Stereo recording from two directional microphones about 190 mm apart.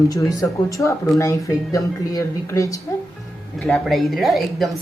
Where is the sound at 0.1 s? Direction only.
15° left (ahead or behind).